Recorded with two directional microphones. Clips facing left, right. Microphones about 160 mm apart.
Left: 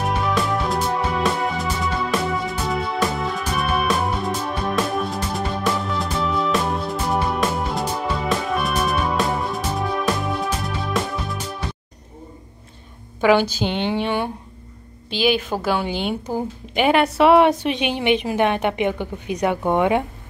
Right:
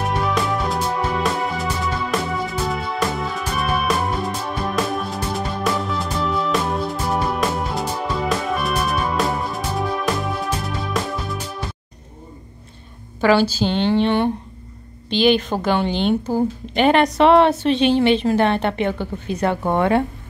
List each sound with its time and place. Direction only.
0.0 s music: centre (ahead or behind)
13.2 s a woman's voice: 15° left (ahead or behind)